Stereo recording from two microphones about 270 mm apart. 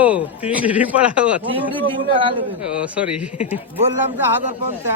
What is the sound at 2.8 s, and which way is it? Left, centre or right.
Speech, centre.